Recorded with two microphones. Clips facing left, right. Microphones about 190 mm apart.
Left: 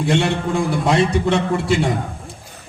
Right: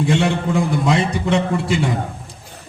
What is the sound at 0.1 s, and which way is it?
Speech, 60° left (ahead or behind).